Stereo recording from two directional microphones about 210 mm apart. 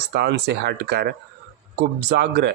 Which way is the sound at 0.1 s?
50° right (ahead or behind).